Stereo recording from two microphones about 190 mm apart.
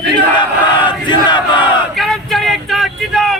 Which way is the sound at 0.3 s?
25° left (ahead or behind).